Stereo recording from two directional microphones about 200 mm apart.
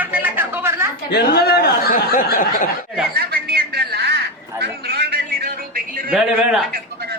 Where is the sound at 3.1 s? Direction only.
50° right (ahead or behind).